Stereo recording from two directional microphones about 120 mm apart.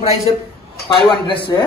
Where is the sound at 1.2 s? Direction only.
45° left (ahead or behind).